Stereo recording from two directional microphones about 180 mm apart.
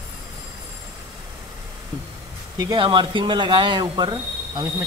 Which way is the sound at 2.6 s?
25° right (ahead or behind).